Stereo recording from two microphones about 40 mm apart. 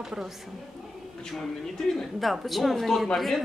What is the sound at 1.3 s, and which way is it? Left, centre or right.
Speech, centre.